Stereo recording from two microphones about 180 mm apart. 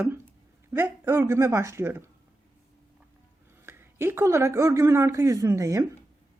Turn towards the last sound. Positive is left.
turn(degrees=-15)  # may be behind; listen again after turning